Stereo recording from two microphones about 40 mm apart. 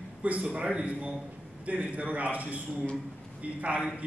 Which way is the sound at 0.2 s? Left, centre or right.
Right.